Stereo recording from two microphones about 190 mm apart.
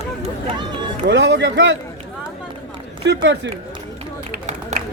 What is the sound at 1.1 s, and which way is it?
Speech, 65° right (ahead or behind).